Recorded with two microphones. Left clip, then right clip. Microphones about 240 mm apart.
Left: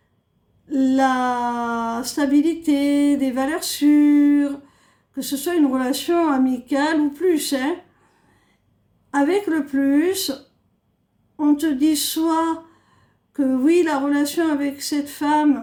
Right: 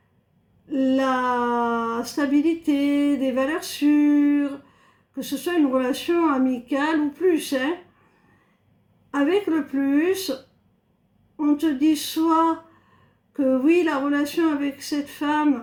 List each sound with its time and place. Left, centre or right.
0.7 s speech: left
9.1 s speech: left
11.6 s speech: left